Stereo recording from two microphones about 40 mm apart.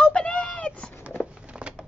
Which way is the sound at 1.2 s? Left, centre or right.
Centre.